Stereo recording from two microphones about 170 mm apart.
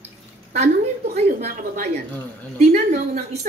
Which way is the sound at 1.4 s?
45° right (ahead or behind).